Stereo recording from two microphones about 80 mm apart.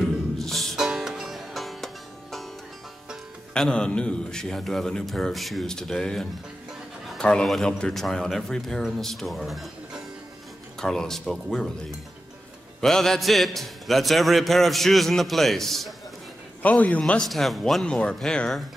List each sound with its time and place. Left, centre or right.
0.4 s music: centre
3.5 s a man's voice: centre
7.1 s a sound: centre
7.4 s a man's voice: centre
12.8 s a man's voice: centre
16.6 s a man's voice: centre
17.0 s a man's voice: centre
17.8 s a man's voice: centre